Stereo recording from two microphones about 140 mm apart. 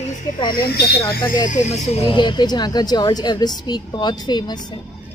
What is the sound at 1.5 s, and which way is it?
Speech, 55° left (ahead or behind).